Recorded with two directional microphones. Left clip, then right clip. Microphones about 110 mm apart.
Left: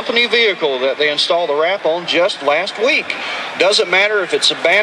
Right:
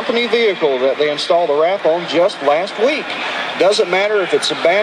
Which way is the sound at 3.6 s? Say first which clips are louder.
Left 1 dB; 15° left (ahead or behind).